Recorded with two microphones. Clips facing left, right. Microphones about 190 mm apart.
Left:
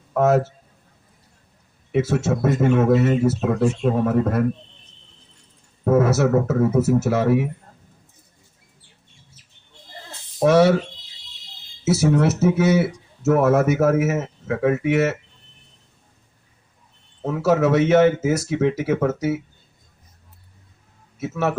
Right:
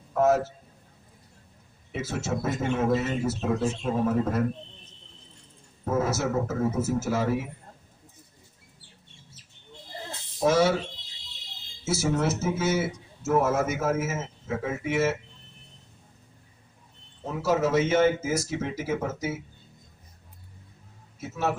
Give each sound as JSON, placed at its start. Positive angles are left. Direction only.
{"t": 0.1, "sound": "a man's voice", "side_deg": 70}
{"t": 1.9, "sound": "speech", "side_deg": 65}
{"t": 5.8, "sound": "speech", "side_deg": 70}
{"t": 10.4, "sound": "speech", "side_deg": 65}
{"t": 11.9, "sound": "speech", "side_deg": 65}
{"t": 17.2, "sound": "speech", "side_deg": 70}
{"t": 21.2, "sound": "speech", "side_deg": 70}